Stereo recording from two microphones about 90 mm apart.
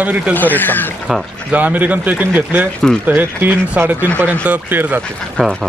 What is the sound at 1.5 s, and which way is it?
Speech, 15° right (ahead or behind).